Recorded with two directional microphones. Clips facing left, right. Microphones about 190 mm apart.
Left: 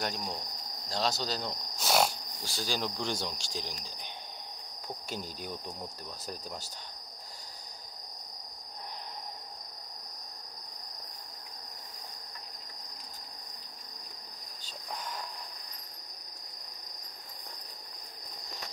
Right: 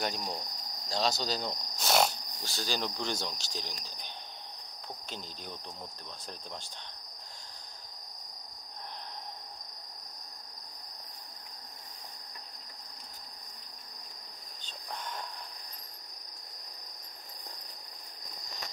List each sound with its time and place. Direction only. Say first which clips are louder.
0.0 s cricket: right 1 dB; centre (ahead or behind)
0.8 s speech: right 1 dB; centre (ahead or behind)